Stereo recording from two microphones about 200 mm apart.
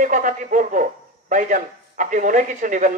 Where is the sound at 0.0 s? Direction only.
40° right (ahead or behind).